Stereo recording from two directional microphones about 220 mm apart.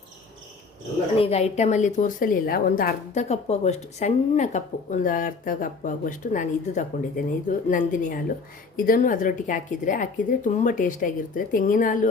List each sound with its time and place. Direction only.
1.2 s a woman's voice: 30° left (ahead or behind)